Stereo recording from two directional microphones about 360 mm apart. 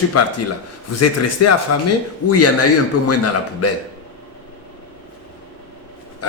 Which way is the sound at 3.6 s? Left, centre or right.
Left.